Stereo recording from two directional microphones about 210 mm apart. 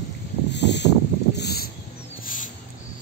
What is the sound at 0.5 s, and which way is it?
Pulleys, 55° left (ahead or behind).